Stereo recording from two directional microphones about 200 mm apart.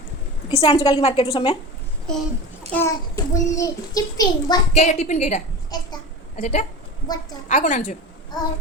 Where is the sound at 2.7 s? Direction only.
15° left (ahead or behind).